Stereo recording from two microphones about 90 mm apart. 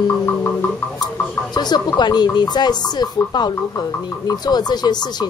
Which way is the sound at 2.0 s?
55° left (ahead or behind).